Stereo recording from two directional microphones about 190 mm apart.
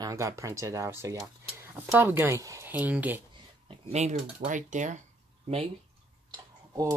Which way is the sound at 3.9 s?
35° right (ahead or behind).